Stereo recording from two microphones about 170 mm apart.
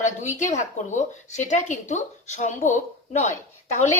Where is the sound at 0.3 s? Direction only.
45° left (ahead or behind).